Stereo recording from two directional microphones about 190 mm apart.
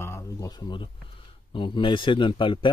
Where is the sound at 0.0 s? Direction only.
15° left (ahead or behind).